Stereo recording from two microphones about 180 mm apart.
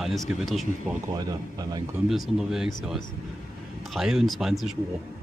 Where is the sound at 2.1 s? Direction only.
5° right (ahead or behind).